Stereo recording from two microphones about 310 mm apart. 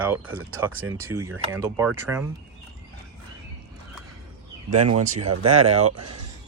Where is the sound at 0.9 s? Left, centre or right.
Centre.